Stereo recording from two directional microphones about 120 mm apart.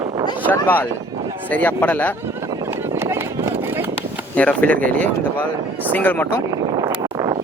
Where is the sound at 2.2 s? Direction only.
20° right (ahead or behind).